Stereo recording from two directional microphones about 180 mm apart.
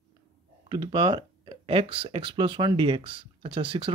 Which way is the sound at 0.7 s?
25° right (ahead or behind).